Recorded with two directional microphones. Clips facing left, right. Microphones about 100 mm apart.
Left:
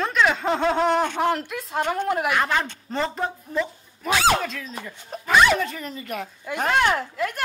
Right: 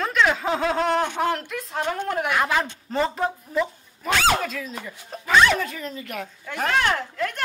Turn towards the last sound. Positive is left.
turn(degrees=5)  # may be behind; listen again after turning